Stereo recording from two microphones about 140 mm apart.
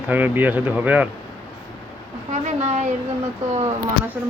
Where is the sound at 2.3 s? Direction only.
55° right (ahead or behind).